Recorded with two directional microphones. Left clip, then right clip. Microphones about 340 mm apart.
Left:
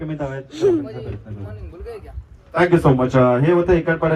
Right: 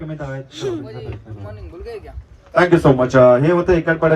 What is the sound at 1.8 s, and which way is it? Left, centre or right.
A man's voice, right.